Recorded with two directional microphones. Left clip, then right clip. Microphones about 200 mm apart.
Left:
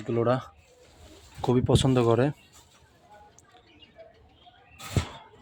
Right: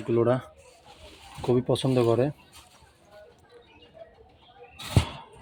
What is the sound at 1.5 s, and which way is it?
Speech, 30° left (ahead or behind).